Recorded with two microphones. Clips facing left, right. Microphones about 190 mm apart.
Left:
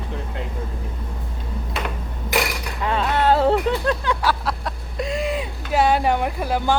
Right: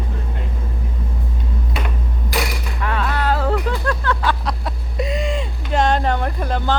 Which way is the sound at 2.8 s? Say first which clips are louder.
Left 3 dB; 25° left (ahead or behind).